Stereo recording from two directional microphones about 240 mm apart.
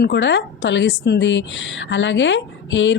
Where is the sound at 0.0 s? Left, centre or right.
Left.